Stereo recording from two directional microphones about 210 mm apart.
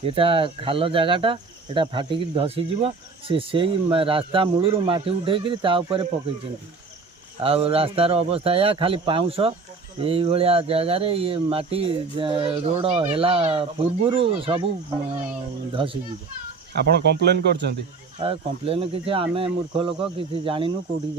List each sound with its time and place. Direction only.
0.0 s speech: 25° right (ahead or behind)
7.4 s speech: 25° right (ahead or behind)
15.7 s speech: 25° right (ahead or behind)
16.9 s speech: 50° right (ahead or behind)
18.2 s speech: 25° right (ahead or behind)